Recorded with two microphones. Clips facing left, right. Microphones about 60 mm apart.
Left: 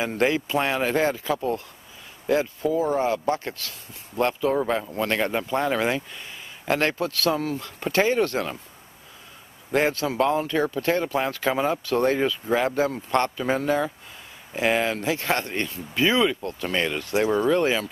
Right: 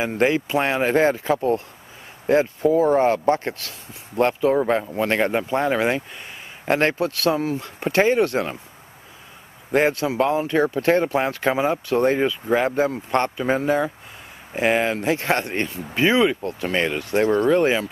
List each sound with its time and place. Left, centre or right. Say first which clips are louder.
0.0 s speech: right 3 dB; centre
9.7 s speech: right 3 dB; centre
10.5 s speech: right 5 dB; right; by 12.7 s centre
12.9 s speech: right 2 dB; right
15.0 s speech: right 3 dB; right
16.2 s speech: right 3 dB; centre
17.1 s speech: right 3 dB; centre
17.5 s speech: right 3 dB; centre